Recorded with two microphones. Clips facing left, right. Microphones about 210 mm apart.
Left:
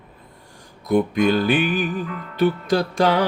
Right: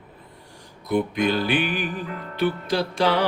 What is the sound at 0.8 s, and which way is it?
Music, 45° left (ahead or behind).